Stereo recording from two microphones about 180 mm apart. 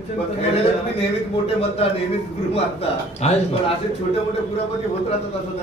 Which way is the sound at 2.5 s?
35° left (ahead or behind).